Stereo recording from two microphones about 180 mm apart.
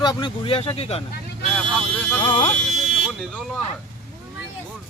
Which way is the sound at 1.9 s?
5° left (ahead or behind).